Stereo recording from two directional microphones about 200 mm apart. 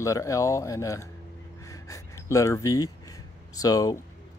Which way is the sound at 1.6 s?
15° left (ahead or behind).